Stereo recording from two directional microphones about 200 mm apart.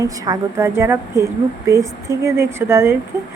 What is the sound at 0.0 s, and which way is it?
A woman's voice, 15° right (ahead or behind).